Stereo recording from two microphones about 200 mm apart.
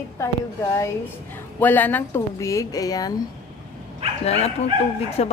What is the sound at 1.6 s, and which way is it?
A woman's voice, 10° left (ahead or behind).